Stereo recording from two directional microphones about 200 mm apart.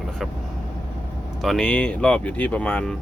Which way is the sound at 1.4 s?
5° left (ahead or behind).